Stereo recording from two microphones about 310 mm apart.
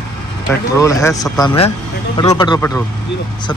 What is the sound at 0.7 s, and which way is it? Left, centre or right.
Speech, centre.